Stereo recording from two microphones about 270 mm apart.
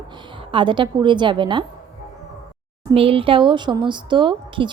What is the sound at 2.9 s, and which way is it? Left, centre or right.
A woman's voice, right.